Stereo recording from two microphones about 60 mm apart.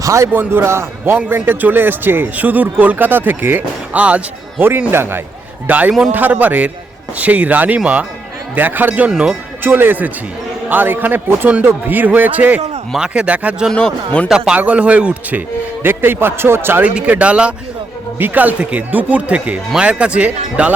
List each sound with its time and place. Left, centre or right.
0.0 s a man's voice: right
0.3 s a man's voice: right
3.9 s speech: right
4.9 s a man's voice: right
5.6 s a man's voice: right
9.0 s speech: centre
9.6 s a man's voice: right
13.0 s speech: centre
13.7 s speech: centre
14.3 s a man's voice: centre; by 16.8 s right
16.8 s speech: right